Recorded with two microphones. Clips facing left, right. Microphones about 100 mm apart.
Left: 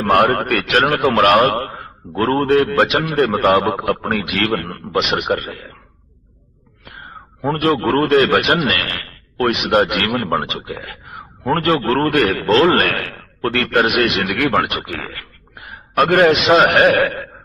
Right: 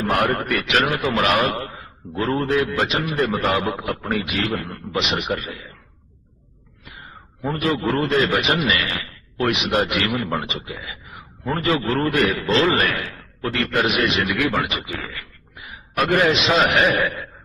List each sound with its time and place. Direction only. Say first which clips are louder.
0.0 s a man's voice: left 6 dB; 55° left (ahead or behind)
7.4 s a man's voice: left 5 dB; 60° left (ahead or behind)